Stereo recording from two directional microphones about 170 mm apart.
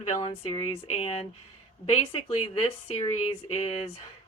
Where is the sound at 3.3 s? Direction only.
35° left (ahead or behind).